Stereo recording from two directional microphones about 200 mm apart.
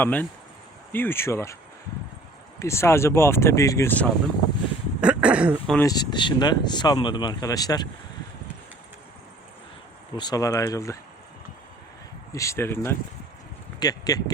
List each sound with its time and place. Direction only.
0.0 s speech: 10° left (ahead or behind)
2.6 s speech: 15° left (ahead or behind)
4.9 s a sound: 5° right (ahead or behind)
5.8 s speech: 20° left (ahead or behind)
10.2 s speech: 20° left (ahead or behind)
12.3 s speech: 15° left (ahead or behind)